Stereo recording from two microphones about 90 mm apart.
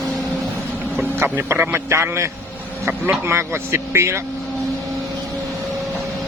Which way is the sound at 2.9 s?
20° right (ahead or behind).